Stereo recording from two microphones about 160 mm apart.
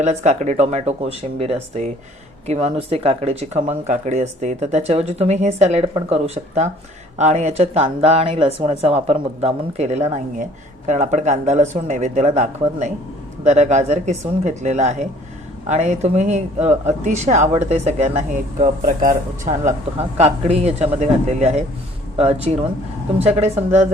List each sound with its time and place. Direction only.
0.0 s speech: 45° right (ahead or behind)